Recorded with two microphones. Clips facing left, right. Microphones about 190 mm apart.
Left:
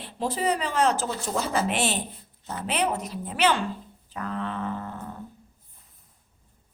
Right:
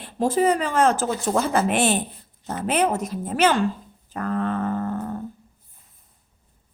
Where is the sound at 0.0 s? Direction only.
50° right (ahead or behind).